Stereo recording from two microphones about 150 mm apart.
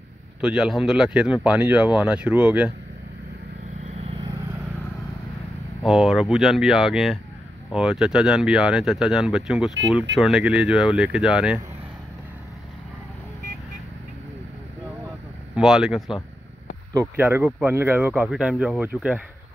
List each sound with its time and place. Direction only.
0.4 s speech: 5° right (ahead or behind)
3.9 s vehicle: 40° right (ahead or behind)
4.2 s vehicle: 20° right (ahead or behind)
5.8 s speech: centre (ahead or behind)
15.5 s speech: 5° right (ahead or behind)
17.2 s speech: 15° right (ahead or behind)